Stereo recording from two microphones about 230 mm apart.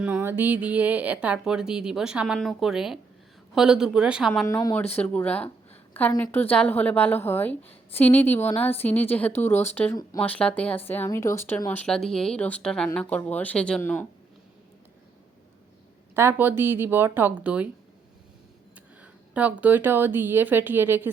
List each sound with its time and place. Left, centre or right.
0.0 s speech: centre
4.3 s speech: centre
16.1 s a woman's voice: centre
19.3 s a woman's voice: centre